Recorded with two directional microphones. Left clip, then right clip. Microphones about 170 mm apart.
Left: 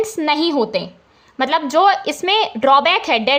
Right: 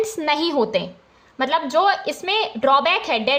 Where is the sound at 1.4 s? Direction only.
20° left (ahead or behind).